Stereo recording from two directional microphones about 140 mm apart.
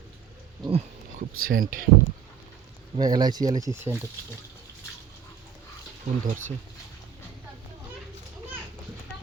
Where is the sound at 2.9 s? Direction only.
30° right (ahead or behind).